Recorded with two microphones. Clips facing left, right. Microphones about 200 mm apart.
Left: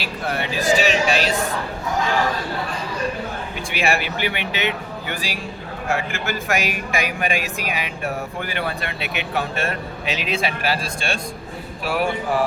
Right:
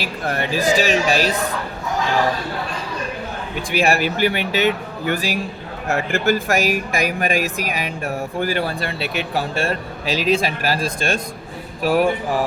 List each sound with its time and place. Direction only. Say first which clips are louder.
0.0 s speech: right 2 dB; 45° right (ahead or behind)
3.8 s speech: right 5 dB; 40° right (ahead or behind)